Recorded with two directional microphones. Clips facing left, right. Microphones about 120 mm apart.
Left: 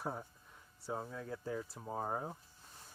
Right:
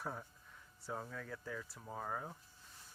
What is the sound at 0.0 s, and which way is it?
Speech, 25° left (ahead or behind).